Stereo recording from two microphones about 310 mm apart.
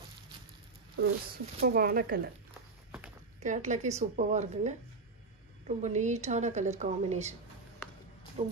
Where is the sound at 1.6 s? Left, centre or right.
Right.